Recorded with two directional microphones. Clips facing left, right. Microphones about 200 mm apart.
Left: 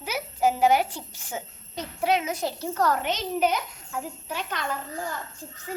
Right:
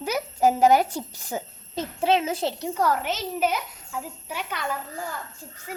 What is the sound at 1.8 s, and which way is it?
A child's voice, 25° right (ahead or behind).